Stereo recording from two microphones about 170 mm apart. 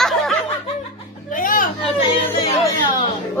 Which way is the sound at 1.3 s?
55° left (ahead or behind).